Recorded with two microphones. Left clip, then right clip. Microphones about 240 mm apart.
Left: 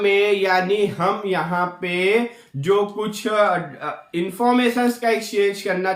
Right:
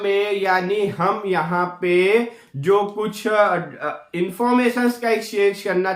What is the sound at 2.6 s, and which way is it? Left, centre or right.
Speech, centre.